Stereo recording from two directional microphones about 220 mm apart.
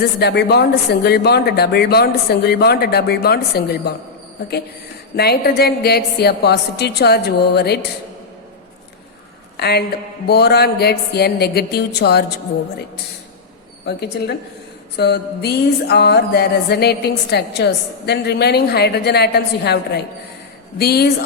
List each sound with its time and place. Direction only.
0.2 s speech: 50° left (ahead or behind)
5.1 s speech: 45° left (ahead or behind)
9.6 s a woman's voice: 45° left (ahead or behind)
13.8 s speech: 45° left (ahead or behind)